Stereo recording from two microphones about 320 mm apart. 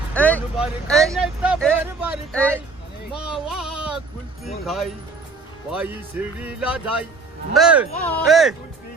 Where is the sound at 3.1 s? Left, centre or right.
Centre.